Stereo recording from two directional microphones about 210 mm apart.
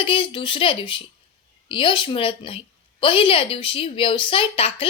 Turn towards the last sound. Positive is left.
turn(degrees=25)  # may be behind; listen again after turning